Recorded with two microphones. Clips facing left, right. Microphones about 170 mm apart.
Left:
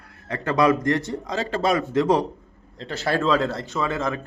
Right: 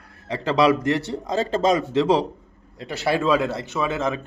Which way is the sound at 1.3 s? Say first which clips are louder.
Right 3 dB; 25° right (ahead or behind).